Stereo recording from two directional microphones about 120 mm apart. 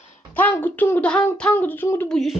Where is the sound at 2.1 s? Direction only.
Centre (ahead or behind).